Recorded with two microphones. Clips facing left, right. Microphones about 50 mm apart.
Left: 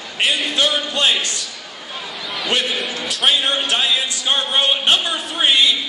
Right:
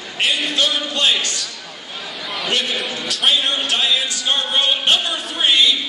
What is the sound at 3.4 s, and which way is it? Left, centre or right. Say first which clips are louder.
Speech: left 1 dB; centre.